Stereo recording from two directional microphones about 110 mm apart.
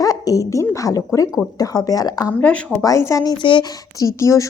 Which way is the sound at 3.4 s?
45° left (ahead or behind).